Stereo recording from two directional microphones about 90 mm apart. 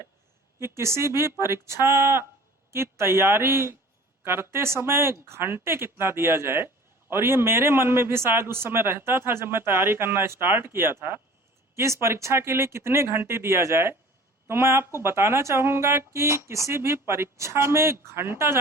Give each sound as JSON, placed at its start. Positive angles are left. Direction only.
{"t": 0.8, "sound": "a man's voice", "side_deg": -30}